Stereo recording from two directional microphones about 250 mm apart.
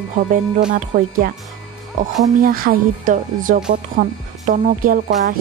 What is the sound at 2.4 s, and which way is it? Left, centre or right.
Speech, right.